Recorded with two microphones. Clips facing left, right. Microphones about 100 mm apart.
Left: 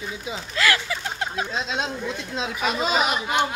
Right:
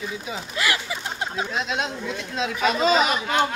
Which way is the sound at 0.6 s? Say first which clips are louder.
Left 3 dB; 15° right (ahead or behind).